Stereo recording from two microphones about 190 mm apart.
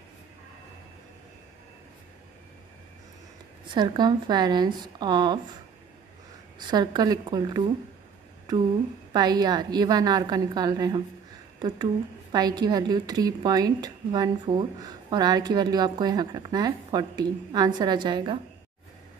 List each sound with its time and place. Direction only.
3.6 s a woman's voice: 25° right (ahead or behind)
6.7 s a woman's voice: 20° right (ahead or behind)
9.1 s a woman's voice: 20° right (ahead or behind)